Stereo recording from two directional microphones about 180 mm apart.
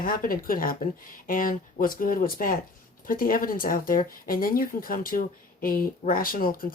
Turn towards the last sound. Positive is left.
turn(degrees=50)  # may be behind; listen again after turning